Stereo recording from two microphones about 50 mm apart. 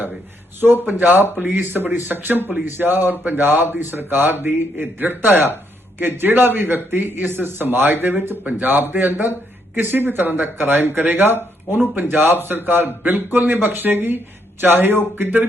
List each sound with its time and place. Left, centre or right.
0.6 s speech: right